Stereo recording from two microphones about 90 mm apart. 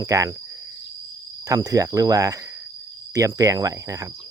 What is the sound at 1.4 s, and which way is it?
Speech, 40° right (ahead or behind).